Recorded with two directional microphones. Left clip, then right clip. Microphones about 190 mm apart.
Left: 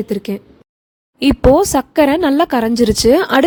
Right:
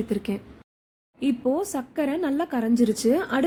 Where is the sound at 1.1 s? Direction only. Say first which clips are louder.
Left 14 dB; 60° left (ahead or behind).